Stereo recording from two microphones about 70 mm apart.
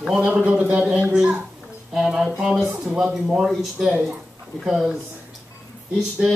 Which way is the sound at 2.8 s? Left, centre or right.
Centre.